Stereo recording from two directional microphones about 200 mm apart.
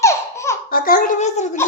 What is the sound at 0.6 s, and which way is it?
Speech, 45° left (ahead or behind).